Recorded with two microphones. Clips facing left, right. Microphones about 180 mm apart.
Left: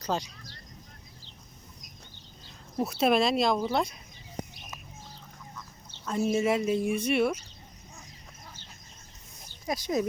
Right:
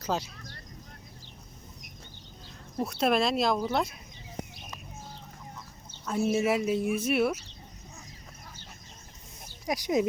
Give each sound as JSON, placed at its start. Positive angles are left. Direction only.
{"t": 0.0, "sound": "speech", "side_deg": -5}
{"t": 2.7, "sound": "speech", "side_deg": 0}
{"t": 6.1, "sound": "speech", "side_deg": -5}
{"t": 9.5, "sound": "speech", "side_deg": -15}